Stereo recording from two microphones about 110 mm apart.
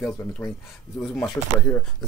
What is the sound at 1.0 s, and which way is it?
Speech, 5° left (ahead or behind).